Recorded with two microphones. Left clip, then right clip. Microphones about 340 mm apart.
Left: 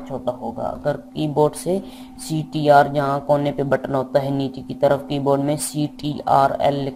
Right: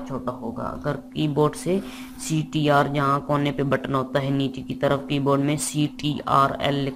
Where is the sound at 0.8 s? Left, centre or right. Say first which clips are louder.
Left 2 dB; left.